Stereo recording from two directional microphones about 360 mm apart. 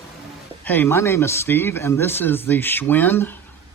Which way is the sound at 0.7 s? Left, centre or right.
Centre.